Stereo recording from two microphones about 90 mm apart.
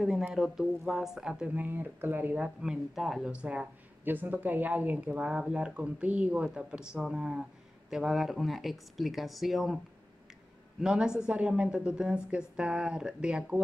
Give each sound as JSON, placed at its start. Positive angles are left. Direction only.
{"t": 0.3, "sound": "speech", "side_deg": -5}
{"t": 1.5, "sound": "speech", "side_deg": -20}
{"t": 2.6, "sound": "speech", "side_deg": -5}
{"t": 3.3, "sound": "speech", "side_deg": -15}
{"t": 10.8, "sound": "speech", "side_deg": -5}